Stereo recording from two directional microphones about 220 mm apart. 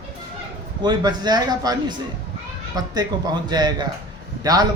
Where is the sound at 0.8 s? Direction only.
20° right (ahead or behind).